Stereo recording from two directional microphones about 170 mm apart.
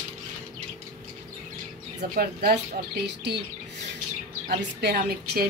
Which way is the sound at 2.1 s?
60° right (ahead or behind).